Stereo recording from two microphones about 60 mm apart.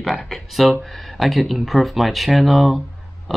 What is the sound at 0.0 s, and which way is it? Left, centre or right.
Speech, centre.